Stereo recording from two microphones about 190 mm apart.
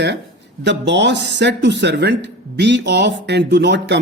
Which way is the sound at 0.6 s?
65° right (ahead or behind).